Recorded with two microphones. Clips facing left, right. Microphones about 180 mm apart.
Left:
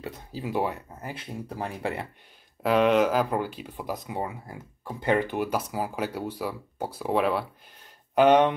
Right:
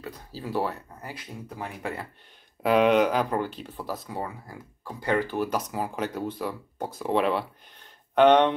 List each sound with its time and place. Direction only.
0.0 s speech: 20° left (ahead or behind)
2.6 s speech: centre (ahead or behind); by 5.6 s 15° left (ahead or behind)
5.7 s speech: 5° left (ahead or behind)